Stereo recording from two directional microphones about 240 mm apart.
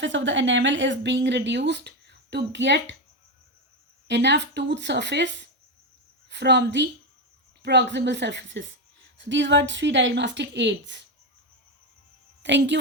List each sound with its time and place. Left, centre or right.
0.0 s speech: right
4.1 s speech: right
12.4 s a woman's voice: right